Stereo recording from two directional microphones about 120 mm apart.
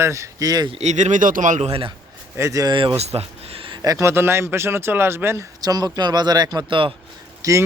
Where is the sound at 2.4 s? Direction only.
25° right (ahead or behind).